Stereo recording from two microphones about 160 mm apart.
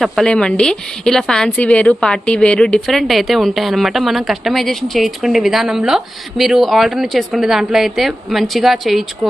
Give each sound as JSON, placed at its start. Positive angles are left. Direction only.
{"t": 0.0, "sound": "a woman's voice", "side_deg": 5}